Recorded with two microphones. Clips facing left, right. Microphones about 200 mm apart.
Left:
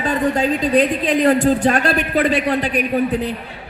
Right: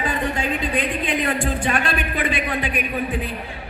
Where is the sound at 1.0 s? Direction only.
40° left (ahead or behind).